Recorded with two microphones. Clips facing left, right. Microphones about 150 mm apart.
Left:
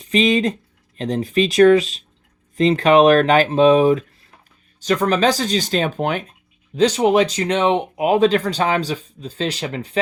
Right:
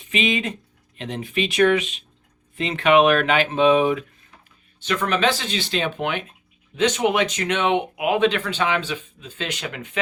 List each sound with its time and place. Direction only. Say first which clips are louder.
0.0 s speech: left 7 dB; 35° left (ahead or behind)